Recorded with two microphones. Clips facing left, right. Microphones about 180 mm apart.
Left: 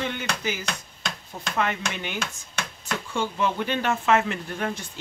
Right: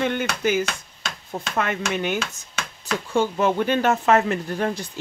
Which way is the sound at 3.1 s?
45° right (ahead or behind).